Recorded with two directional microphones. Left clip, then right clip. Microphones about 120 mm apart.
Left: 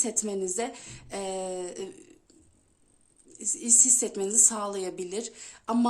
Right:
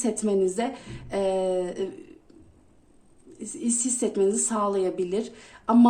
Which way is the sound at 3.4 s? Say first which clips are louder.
Left 4 dB; 30° left (ahead or behind).